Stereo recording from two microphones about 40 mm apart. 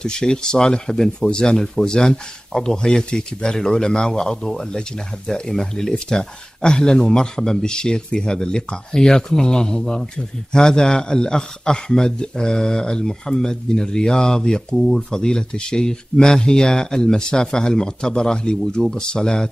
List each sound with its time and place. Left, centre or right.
0.0 s speech: centre
14.8 s speech: centre
15.0 s speech: centre